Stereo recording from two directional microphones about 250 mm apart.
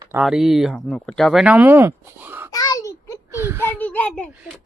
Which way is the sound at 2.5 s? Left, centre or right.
Centre.